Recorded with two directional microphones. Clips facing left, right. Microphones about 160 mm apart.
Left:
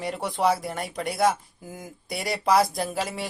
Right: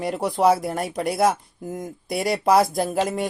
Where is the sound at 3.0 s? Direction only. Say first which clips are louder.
Right 7 dB; 50° right (ahead or behind).